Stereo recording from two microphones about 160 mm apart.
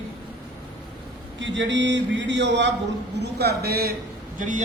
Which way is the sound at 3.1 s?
90° right.